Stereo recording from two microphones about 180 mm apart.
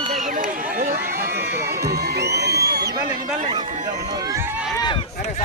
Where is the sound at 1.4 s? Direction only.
65° right (ahead or behind).